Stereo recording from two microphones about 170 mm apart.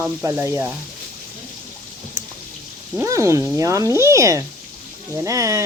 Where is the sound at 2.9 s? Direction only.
15° right (ahead or behind).